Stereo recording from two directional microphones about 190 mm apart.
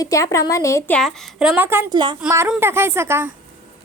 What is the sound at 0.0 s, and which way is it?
Speech, 15° left (ahead or behind).